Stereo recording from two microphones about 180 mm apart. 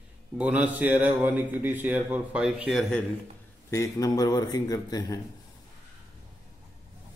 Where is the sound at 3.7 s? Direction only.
15° left (ahead or behind).